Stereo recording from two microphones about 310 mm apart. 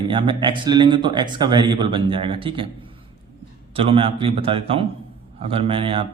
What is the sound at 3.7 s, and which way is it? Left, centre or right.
A man's voice, centre.